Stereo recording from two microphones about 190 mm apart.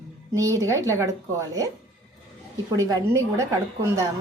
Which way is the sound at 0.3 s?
15° right (ahead or behind).